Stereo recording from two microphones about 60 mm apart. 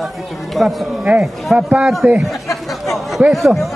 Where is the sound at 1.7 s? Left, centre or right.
Centre.